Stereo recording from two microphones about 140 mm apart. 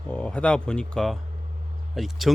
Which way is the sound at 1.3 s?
50° right (ahead or behind).